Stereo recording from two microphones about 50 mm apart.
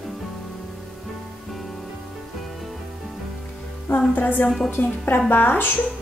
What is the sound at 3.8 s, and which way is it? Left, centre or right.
Music, left.